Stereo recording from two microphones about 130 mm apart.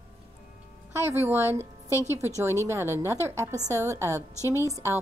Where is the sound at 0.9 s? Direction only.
20° right (ahead or behind).